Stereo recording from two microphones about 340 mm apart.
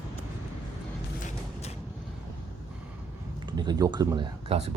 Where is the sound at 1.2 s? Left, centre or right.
Centre.